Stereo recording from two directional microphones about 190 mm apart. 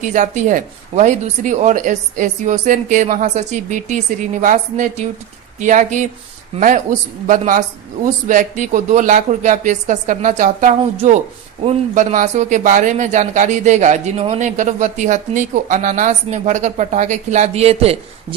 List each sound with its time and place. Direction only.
0.0 s speech: 40° right (ahead or behind)